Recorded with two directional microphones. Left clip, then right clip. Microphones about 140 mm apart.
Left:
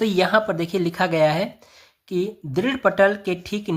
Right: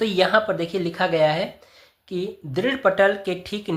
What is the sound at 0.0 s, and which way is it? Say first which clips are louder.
Speech: even; 35° left (ahead or behind).